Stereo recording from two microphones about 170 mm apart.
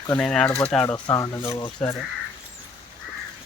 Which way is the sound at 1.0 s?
20° left (ahead or behind).